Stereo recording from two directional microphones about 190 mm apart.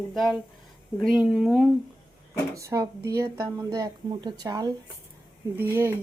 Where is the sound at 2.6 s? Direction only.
15° right (ahead or behind).